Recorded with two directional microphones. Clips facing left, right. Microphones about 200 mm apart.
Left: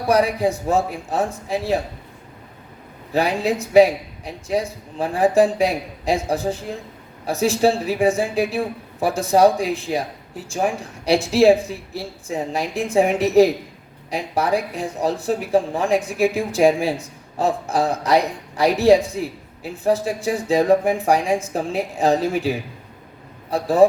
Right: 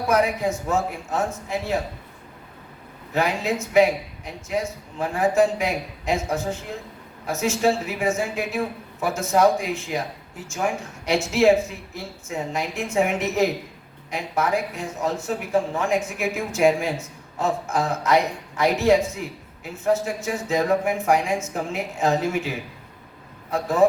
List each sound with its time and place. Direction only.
0.1 s speech: 35° left (ahead or behind)
3.1 s speech: 35° left (ahead or behind)